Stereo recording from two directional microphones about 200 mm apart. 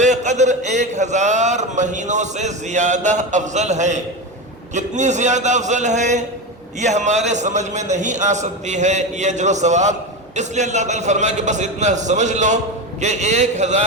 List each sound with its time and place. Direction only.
0.0 s speech: 35° right (ahead or behind)